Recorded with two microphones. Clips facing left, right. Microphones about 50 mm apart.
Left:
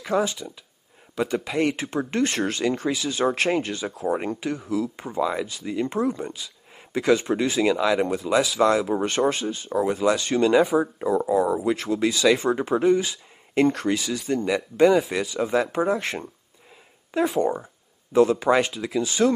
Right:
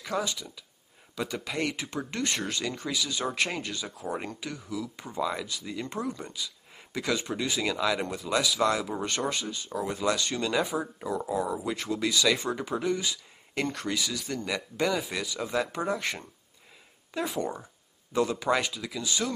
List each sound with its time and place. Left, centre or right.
0.0 s speech: left
1.8 s speech: left
7.6 s speech: centre; by 19.3 s left